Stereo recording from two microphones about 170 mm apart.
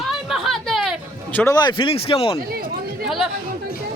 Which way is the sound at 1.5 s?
25° left (ahead or behind).